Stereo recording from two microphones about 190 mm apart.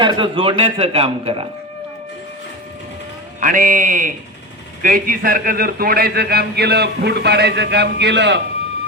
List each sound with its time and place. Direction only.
0.0 s a man's voice: 25° right (ahead or behind)
3.4 s a man's voice: 45° right (ahead or behind); by 8.4 s 65° right (ahead or behind)